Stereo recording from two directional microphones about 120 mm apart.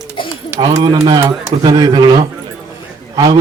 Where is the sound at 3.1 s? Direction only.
35° right (ahead or behind).